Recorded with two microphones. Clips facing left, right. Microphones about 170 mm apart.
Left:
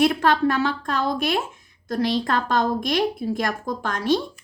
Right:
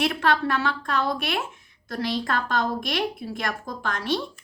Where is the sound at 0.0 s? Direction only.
40° left (ahead or behind).